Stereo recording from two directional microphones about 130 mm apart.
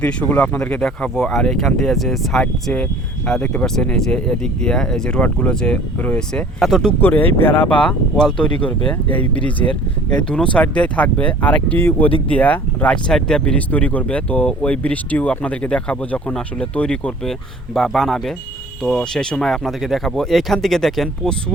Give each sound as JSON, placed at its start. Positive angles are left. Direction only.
{"t": 0.0, "sound": "speech", "side_deg": 10}
{"t": 7.0, "sound": "speech", "side_deg": 15}